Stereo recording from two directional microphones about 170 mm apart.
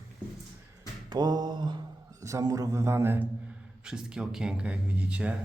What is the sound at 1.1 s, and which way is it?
Speech, 25° right (ahead or behind).